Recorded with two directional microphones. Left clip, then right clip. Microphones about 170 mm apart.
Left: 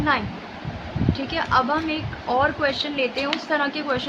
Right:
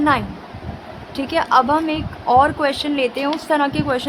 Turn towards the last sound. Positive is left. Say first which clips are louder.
# right 4 dB
turn(degrees=-35)  # may be behind; listen again after turning